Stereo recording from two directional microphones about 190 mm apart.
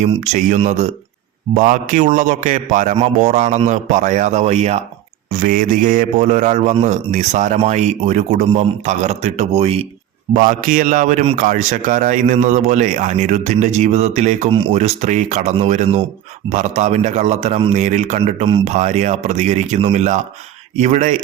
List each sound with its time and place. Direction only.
0.0 s a man's voice: 35° right (ahead or behind)
5.4 s a man's voice: 45° right (ahead or behind)
10.3 s a man's voice: 45° right (ahead or behind)